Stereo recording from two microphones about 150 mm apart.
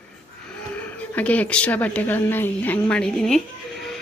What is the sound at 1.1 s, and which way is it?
A woman's voice, 10° left (ahead or behind).